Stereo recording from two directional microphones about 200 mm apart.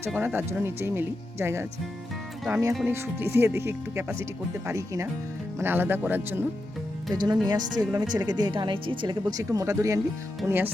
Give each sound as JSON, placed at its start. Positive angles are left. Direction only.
{"t": 0.1, "sound": "speech", "side_deg": -10}
{"t": 7.1, "sound": "speech", "side_deg": -20}